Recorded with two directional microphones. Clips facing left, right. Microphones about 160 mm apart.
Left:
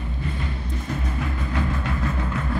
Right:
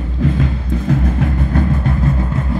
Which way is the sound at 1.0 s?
50° right (ahead or behind).